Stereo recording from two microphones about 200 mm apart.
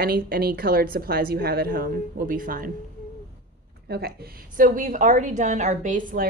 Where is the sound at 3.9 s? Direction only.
50° right (ahead or behind).